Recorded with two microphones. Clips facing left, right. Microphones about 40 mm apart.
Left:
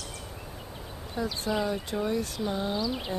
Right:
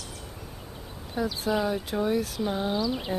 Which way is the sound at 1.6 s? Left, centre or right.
Centre.